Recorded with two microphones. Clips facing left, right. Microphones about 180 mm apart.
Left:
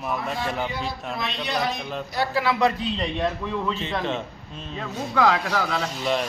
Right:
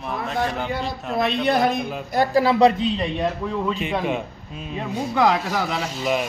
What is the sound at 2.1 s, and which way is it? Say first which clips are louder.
Speech: right 6 dB; 45° right (ahead or behind).